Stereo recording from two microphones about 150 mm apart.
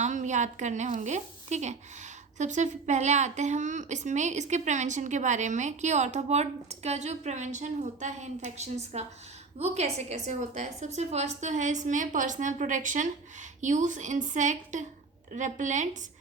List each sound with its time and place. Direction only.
0.0 s a woman's voice: 55° right (ahead or behind)